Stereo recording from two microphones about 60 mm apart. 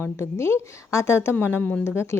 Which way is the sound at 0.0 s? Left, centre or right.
Left.